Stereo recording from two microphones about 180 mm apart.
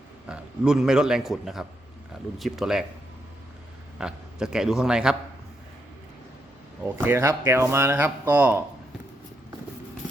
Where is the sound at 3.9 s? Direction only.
5° right (ahead or behind).